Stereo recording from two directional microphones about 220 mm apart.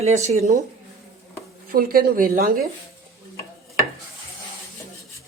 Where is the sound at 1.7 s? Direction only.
40° right (ahead or behind).